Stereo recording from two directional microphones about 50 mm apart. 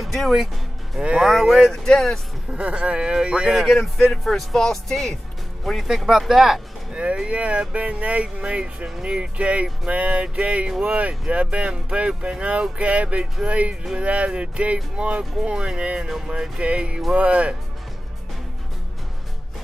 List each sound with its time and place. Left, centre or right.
0.0 s speech: centre
1.7 s speech: centre
2.5 s speech: right
3.4 s speech: centre
6.9 s speech: centre